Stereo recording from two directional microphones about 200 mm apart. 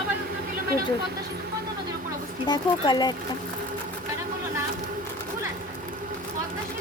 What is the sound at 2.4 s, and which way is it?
Speech, 20° left (ahead or behind).